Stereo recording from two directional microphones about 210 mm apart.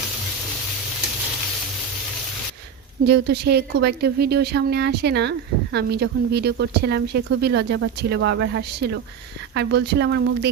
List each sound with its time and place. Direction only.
3.0 s a woman's voice: 50° right (ahead or behind)